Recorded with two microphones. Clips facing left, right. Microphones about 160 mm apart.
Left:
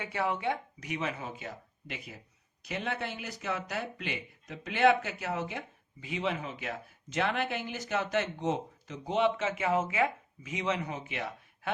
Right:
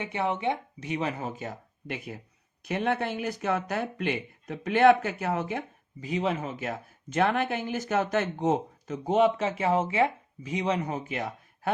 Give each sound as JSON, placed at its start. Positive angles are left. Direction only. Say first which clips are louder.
{"t": 0.0, "sound": "speech", "louder": "right 3 dB", "side_deg": -20}